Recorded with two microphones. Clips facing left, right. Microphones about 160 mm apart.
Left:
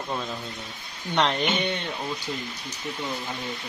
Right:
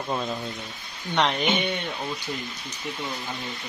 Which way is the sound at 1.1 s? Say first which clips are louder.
Even; centre (ahead or behind).